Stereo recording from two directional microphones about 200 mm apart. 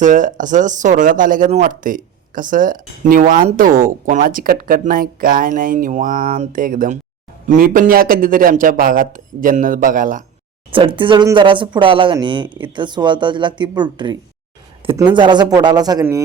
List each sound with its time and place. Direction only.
0.0 s speech: 40° right (ahead or behind)
10.7 s speech: 25° right (ahead or behind)